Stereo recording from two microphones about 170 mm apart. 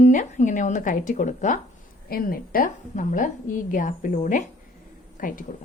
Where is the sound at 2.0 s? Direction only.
60° left (ahead or behind).